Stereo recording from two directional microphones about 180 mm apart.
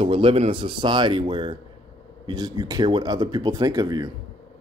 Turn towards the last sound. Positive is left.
turn(degrees=-25)  # may be behind; listen again after turning